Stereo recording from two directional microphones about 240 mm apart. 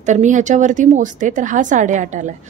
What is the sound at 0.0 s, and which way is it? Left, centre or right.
A woman's voice, right.